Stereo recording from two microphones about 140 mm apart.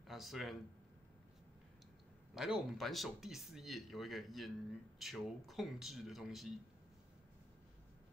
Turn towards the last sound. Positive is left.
turn(degrees=0)  # may be behind; listen again after turning